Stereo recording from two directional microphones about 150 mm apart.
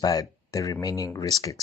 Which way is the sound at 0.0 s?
25° left (ahead or behind).